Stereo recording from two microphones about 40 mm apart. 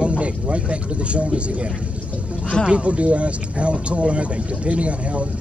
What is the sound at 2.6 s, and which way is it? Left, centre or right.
Speech, right.